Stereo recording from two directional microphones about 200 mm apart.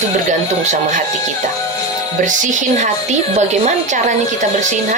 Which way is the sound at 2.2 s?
40° right (ahead or behind).